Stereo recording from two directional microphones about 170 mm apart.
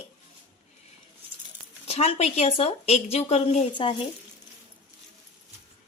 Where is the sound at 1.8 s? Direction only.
35° left (ahead or behind).